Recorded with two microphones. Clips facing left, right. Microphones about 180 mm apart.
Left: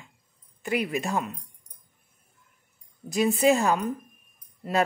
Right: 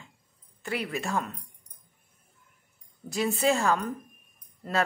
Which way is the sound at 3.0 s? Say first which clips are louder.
Left 4 dB; 15° left (ahead or behind).